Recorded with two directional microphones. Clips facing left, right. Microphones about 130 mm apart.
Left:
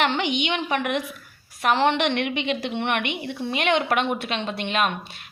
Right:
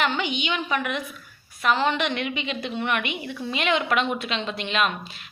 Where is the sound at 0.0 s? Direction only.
65° left (ahead or behind).